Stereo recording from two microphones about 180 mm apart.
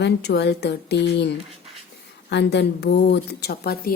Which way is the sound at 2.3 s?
70° left (ahead or behind).